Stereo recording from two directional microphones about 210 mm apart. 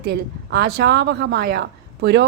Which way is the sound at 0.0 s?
50° right (ahead or behind).